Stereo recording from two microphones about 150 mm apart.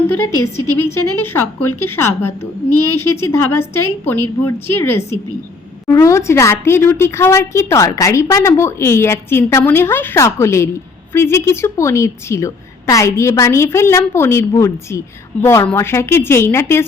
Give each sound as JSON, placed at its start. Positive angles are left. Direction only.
{"t": 1.2, "sound": "a woman's voice", "side_deg": 15}